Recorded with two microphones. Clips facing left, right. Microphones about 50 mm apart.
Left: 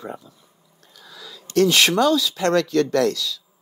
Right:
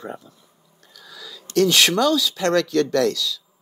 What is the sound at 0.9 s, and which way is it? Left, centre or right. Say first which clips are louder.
Speech: right 1 dB; left.